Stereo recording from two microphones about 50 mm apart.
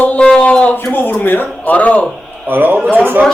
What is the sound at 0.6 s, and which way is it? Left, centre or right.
A man's voice, left.